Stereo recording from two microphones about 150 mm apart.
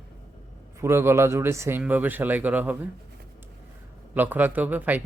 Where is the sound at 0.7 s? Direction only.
15° right (ahead or behind).